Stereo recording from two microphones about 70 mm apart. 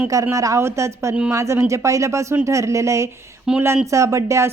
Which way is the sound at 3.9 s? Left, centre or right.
Right.